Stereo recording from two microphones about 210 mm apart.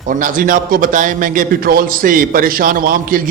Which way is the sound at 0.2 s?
40° right (ahead or behind).